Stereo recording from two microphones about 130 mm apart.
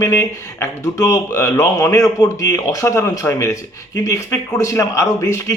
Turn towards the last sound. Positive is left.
turn(degrees=25)  # may be behind; listen again after turning